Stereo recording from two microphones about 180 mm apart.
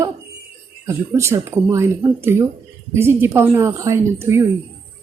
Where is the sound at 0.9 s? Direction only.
15° right (ahead or behind).